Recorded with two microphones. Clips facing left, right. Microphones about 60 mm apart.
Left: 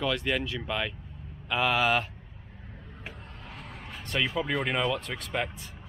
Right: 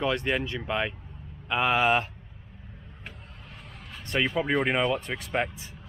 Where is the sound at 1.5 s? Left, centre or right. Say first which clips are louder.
Right 2 dB; centre.